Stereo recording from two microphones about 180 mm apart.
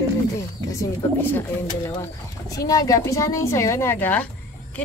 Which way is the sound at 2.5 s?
20° left (ahead or behind).